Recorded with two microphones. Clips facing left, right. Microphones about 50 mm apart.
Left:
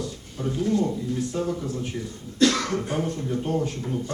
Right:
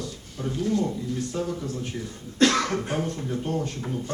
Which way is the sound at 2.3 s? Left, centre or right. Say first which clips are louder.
Even; right.